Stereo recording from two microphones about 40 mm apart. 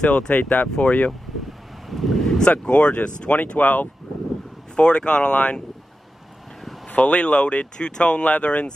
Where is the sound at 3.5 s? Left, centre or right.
Left.